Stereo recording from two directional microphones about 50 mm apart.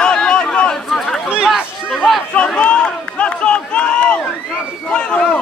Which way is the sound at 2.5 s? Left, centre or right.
Centre.